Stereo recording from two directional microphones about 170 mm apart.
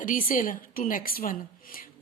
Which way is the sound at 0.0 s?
55° left (ahead or behind).